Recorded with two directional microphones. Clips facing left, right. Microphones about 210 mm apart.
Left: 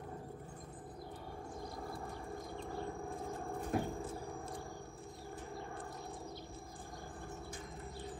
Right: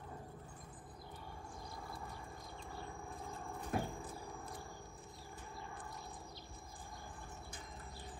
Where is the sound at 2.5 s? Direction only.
55° left (ahead or behind).